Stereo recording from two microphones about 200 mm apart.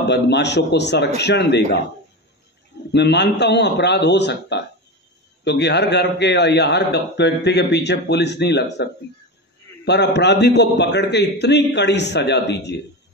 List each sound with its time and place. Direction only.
0.0 s a man's voice: 60° left (ahead or behind)
2.9 s a man's voice: 60° left (ahead or behind)
9.8 s a man's voice: 60° left (ahead or behind)